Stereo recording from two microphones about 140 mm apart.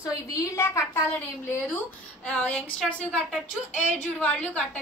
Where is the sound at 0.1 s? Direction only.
25° left (ahead or behind).